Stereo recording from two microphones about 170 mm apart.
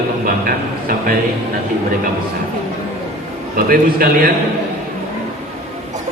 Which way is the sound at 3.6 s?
60° right (ahead or behind).